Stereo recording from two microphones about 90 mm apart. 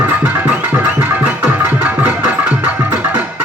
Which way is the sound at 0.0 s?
20° right (ahead or behind).